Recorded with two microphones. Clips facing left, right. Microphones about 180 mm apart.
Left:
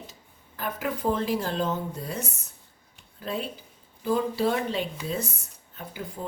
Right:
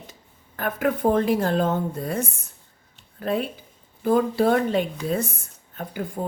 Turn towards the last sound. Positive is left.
turn(degrees=-55)  # may be behind; listen again after turning